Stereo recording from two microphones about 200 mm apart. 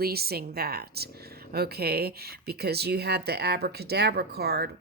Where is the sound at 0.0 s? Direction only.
50° right (ahead or behind).